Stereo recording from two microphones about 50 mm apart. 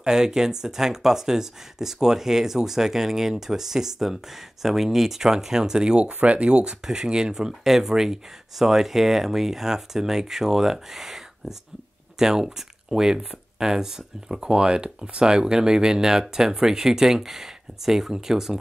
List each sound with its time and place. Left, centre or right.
0.0 s speech: centre